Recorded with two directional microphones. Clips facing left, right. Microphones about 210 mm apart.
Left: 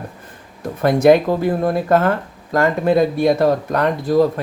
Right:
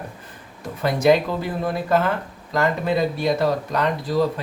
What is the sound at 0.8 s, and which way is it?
Speech, 50° left (ahead or behind).